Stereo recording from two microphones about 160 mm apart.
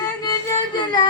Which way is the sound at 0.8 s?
30° left (ahead or behind).